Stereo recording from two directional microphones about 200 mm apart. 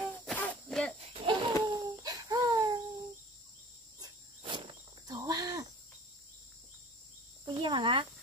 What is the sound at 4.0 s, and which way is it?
Cricket, 25° right (ahead or behind).